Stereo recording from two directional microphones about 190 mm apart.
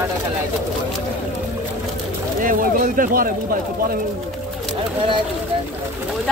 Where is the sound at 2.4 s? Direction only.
45° right (ahead or behind).